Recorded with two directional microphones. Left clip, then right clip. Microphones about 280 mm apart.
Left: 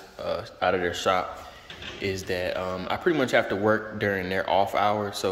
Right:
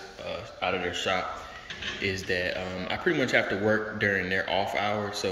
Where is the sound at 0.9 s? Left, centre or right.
Centre.